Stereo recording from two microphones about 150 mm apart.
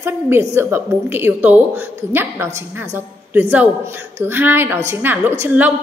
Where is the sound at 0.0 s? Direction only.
20° right (ahead or behind).